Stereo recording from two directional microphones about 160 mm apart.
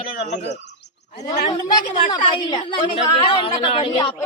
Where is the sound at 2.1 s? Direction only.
30° left (ahead or behind).